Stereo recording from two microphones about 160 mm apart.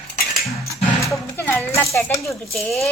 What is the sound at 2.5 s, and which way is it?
Speech, centre (ahead or behind).